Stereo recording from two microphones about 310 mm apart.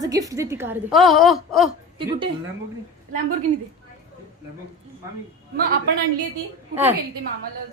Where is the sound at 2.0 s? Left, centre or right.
Centre.